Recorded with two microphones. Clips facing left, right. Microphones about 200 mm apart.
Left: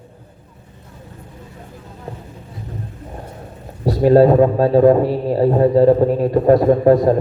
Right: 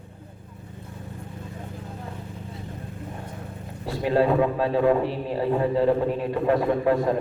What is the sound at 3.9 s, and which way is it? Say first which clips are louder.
A man's voice: left 10 dB; 40° left (ahead or behind).